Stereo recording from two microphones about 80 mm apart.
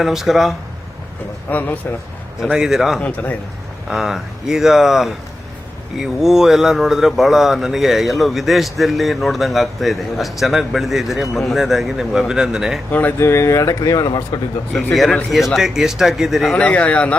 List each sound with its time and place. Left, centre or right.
0.0 s speech: centre
1.5 s a man's voice: left
2.4 s speech: centre
3.0 s a man's voice: centre
3.8 s speech: centre
12.9 s a man's voice: left
13.1 s speech: left
15.3 s speech: centre
16.6 s speech: centre